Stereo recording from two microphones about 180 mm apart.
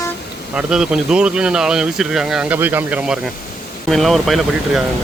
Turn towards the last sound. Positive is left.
turn(degrees=0)  # may be behind; listen again after turning